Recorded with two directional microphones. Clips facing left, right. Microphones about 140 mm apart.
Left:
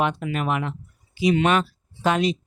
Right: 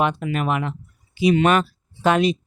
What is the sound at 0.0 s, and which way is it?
Speech, 60° right (ahead or behind).